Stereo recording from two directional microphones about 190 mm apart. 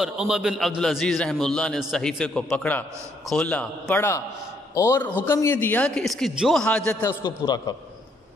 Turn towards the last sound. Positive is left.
turn(degrees=20)  # may be behind; listen again after turning